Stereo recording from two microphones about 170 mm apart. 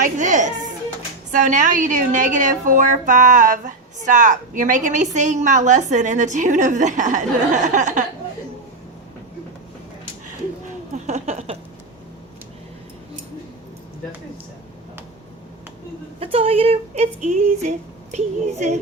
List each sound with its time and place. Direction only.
0.0 s music: 45° right (ahead or behind)
1.3 s a woman's voice: 45° right (ahead or behind)
10.9 s a sound: 40° right (ahead or behind)
16.2 s speech: 35° right (ahead or behind)